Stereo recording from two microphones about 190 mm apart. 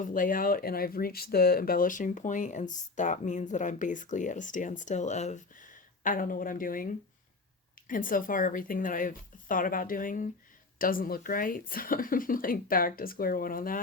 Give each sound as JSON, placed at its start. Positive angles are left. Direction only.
{"t": 0.0, "sound": "speech", "side_deg": 45}